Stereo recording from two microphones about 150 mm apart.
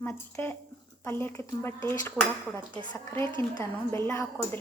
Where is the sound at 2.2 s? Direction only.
Centre (ahead or behind).